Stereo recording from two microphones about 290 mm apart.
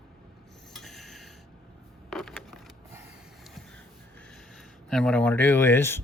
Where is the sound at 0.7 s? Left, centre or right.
Centre.